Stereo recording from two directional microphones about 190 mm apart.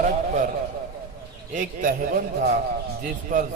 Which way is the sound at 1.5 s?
45° right (ahead or behind).